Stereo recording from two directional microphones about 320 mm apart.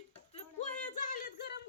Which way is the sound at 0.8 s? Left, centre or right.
Left.